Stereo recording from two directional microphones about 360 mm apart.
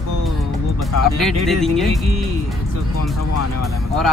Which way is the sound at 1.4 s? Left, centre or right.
Centre.